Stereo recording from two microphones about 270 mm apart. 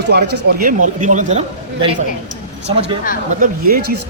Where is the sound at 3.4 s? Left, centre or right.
Right.